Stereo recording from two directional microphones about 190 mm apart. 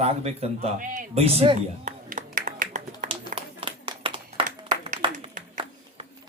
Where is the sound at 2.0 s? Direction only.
45° right (ahead or behind).